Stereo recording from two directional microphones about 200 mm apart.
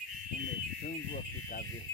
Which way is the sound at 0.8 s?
45° left (ahead or behind).